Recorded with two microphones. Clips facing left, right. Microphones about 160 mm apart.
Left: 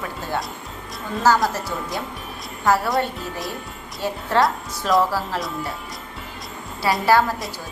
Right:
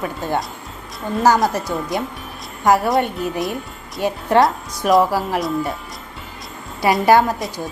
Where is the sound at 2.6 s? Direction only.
15° right (ahead or behind).